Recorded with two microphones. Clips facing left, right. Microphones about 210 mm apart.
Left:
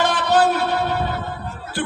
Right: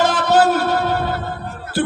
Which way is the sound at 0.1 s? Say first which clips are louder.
Right 3 dB; 40° right (ahead or behind).